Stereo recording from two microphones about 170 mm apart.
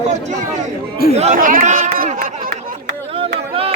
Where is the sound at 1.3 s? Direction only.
55° right (ahead or behind).